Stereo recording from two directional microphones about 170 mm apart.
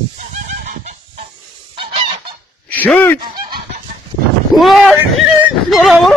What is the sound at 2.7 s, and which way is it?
Speech, 10° left (ahead or behind).